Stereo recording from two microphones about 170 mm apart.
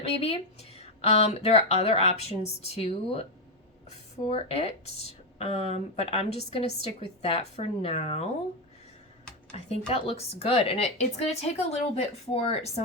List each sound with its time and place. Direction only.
0.0 s speech: 35° left (ahead or behind)
9.9 s speech: 35° left (ahead or behind)